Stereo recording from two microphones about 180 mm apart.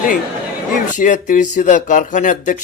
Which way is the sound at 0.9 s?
45° left (ahead or behind).